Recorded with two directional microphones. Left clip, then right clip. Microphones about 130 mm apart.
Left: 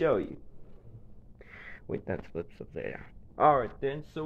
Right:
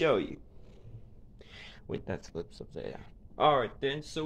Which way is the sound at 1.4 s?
5° right (ahead or behind).